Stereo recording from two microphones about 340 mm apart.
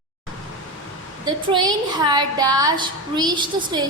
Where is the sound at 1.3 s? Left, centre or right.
Centre.